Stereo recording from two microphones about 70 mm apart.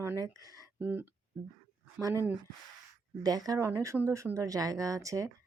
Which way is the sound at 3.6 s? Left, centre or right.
Right.